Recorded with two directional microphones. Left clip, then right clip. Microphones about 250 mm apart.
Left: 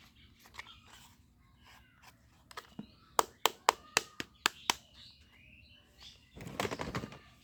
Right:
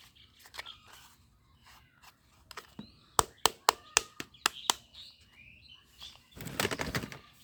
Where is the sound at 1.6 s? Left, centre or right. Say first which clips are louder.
Right 1 dB; centre.